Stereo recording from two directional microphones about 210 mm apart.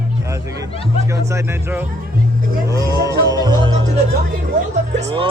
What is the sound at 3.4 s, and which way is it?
Music, 20° right (ahead or behind).